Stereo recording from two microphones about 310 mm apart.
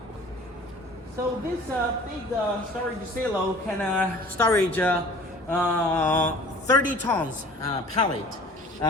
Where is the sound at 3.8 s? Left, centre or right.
Centre.